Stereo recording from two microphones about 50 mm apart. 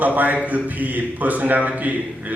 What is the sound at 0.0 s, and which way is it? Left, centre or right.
Speech, right.